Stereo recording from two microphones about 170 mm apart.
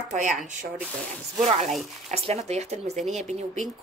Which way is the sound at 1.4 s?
45° right (ahead or behind).